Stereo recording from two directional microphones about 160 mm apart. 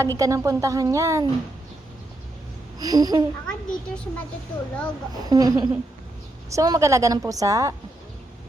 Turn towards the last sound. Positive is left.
turn(degrees=-20)  # may be behind; listen again after turning